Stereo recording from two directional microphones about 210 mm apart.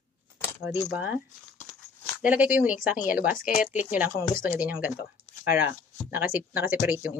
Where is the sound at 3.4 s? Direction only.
40° left (ahead or behind).